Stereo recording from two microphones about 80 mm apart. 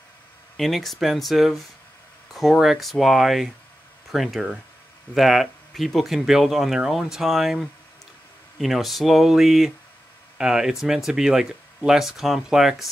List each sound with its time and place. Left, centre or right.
0.6 s speech: centre